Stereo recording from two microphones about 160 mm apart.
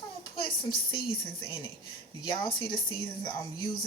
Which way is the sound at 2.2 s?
30° left (ahead or behind).